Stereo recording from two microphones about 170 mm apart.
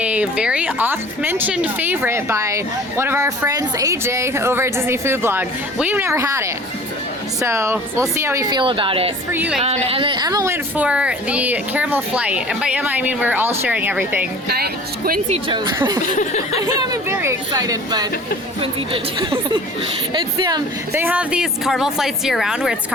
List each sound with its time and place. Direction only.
0.0 s speech: 10° right (ahead or behind); by 9.1 s 35° right (ahead or behind)
9.3 s speech: 10° right (ahead or behind)
9.6 s speech: 35° right (ahead or behind); by 14.3 s 10° right (ahead or behind)
14.4 s speech: 70° right (ahead or behind)
15.3 s speech: 30° right (ahead or behind)
16.0 s a sound: 45° left (ahead or behind)
16.6 s speech: 20° right (ahead or behind)
19.2 s speech: 30° right (ahead or behind)
21.0 s speech: 5° right (ahead or behind)